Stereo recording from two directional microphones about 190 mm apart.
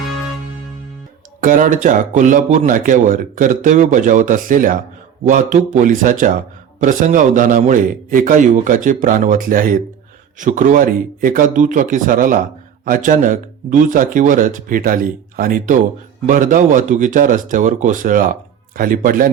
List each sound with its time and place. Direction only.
1.4 s speech: 45° right (ahead or behind)